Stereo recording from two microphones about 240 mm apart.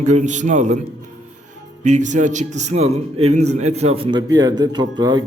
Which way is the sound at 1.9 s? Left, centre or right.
Right.